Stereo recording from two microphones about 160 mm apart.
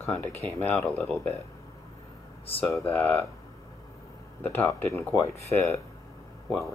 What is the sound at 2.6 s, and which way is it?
Speech, 15° left (ahead or behind).